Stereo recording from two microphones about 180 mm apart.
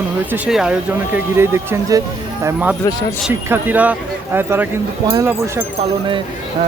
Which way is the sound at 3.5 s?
10° right (ahead or behind).